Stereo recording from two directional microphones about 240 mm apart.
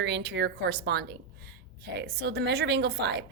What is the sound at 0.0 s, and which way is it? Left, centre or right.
A woman's voice, right.